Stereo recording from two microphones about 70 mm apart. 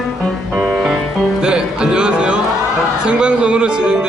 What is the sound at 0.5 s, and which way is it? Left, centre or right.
Music, centre.